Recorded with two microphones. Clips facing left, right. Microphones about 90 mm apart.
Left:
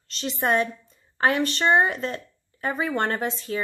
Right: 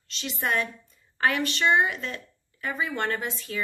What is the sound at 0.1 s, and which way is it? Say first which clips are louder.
Speech: left 5 dB; 35° left (ahead or behind).